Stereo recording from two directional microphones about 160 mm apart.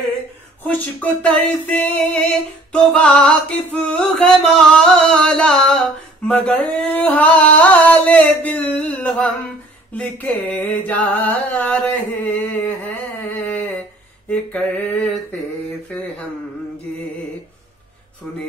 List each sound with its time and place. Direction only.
0.7 s music: 10° left (ahead or behind)
14.3 s music: 5° left (ahead or behind)